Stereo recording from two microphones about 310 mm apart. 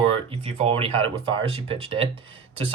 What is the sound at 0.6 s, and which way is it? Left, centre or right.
Speech, centre.